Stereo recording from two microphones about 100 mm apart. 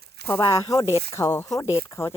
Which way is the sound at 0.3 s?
30° left (ahead or behind).